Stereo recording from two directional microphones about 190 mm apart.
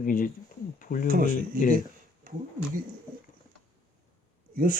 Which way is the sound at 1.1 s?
50° right (ahead or behind).